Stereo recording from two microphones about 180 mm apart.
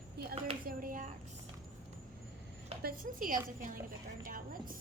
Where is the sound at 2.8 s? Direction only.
50° right (ahead or behind).